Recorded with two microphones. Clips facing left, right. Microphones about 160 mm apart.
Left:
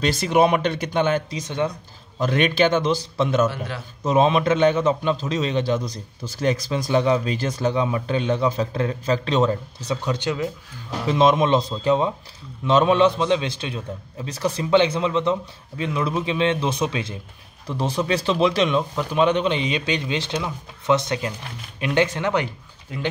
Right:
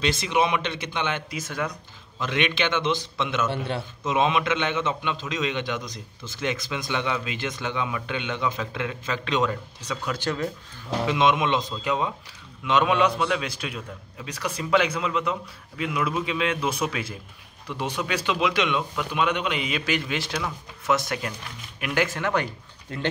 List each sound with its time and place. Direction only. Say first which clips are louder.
0.0 s speech: left 5 dB; 45° left (ahead or behind)
1.3 s a man's voice: left 5 dB; 30° left (ahead or behind)
2.1 s a man's voice: left 6 dB; 40° left (ahead or behind)
3.4 s a man's voice: left 1 dB; 25° right (ahead or behind)
4.0 s a man's voice: left 6 dB; 40° left (ahead or behind); by 10.5 s 15° left (ahead or behind)
11.1 s a man's voice: left 5 dB; 35° left (ahead or behind); by 22.5 s 20° left (ahead or behind)